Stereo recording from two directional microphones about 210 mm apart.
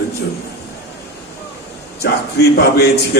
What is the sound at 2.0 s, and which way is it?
A man's voice, 50° left (ahead or behind).